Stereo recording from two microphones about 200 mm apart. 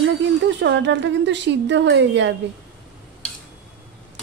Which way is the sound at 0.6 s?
65° right (ahead or behind).